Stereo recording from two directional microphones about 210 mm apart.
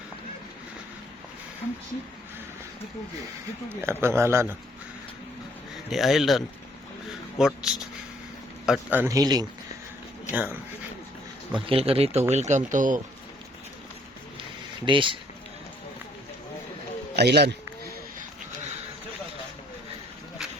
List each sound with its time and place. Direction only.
3.8 s a man's voice: 10° right (ahead or behind)
5.9 s a man's voice: centre (ahead or behind)
11.5 s speech: 25° right (ahead or behind)
14.8 s speech: 25° right (ahead or behind)
17.2 s a man's voice: 50° right (ahead or behind)